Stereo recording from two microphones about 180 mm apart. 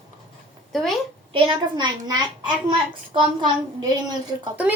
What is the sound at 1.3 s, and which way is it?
A child's voice, 25° right (ahead or behind).